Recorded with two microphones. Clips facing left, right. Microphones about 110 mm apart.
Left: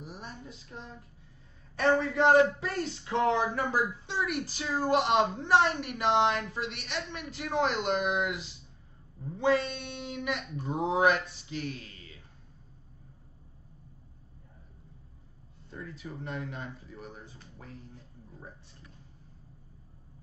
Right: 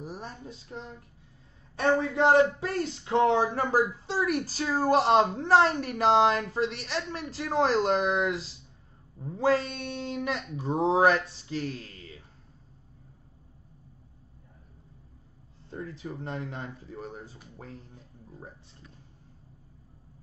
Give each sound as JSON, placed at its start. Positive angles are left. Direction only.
{"t": 0.0, "sound": "speech", "side_deg": -35}
{"t": 1.8, "sound": "speech", "side_deg": -25}
{"t": 15.7, "sound": "speech", "side_deg": -35}